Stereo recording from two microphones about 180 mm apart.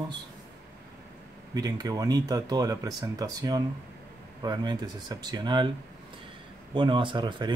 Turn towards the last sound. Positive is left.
turn(degrees=-25)  # may be behind; listen again after turning